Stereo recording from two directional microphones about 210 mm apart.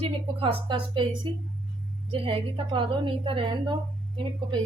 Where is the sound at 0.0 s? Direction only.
25° right (ahead or behind).